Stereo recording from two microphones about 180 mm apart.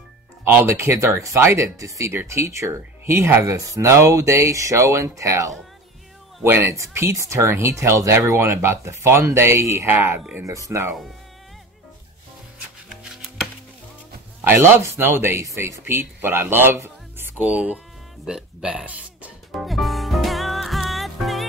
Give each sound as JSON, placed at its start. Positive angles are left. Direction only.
{"t": 0.5, "sound": "speech", "side_deg": -15}
{"t": 12.9, "sound": "music", "side_deg": -5}
{"t": 14.5, "sound": "speech", "side_deg": -15}
{"t": 19.5, "sound": "music", "side_deg": 0}